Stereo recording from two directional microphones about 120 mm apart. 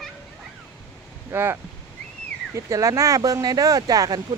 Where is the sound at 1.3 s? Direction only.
20° right (ahead or behind).